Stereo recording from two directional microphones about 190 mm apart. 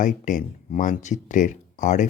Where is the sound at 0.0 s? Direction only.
45° left (ahead or behind).